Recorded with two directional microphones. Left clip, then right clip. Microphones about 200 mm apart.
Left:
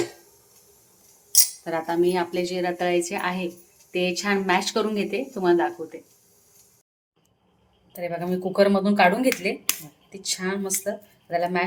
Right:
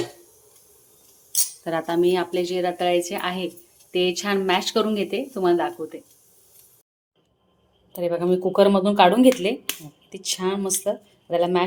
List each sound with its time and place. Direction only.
1.6 s speech: 25° right (ahead or behind)
7.9 s speech: 35° right (ahead or behind)